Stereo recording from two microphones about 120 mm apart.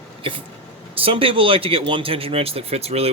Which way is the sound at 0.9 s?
50° right (ahead or behind).